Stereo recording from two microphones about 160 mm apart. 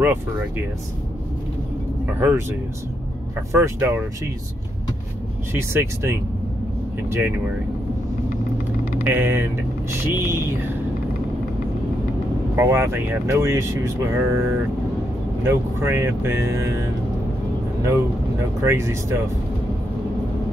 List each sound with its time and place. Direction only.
2.1 s speech: 15° right (ahead or behind)
3.5 s speech: 15° right (ahead or behind)
5.5 s speech: 15° right (ahead or behind)
9.0 s speech: 15° right (ahead or behind)
12.5 s speech: 15° right (ahead or behind)
18.6 s speech: 15° right (ahead or behind)